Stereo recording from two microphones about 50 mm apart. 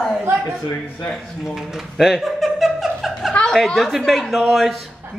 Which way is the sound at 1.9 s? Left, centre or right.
Centre.